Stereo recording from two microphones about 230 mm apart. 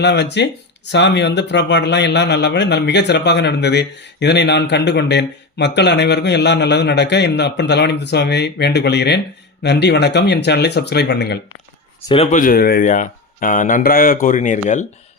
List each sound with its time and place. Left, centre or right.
0.0 s a man's voice: left
12.0 s speech: left